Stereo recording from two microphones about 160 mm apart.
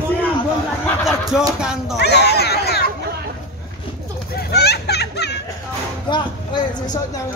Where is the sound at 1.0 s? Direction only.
5° right (ahead or behind).